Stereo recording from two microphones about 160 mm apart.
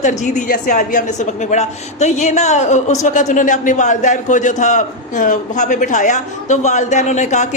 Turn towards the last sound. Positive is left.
turn(degrees=45)  # may be behind; listen again after turning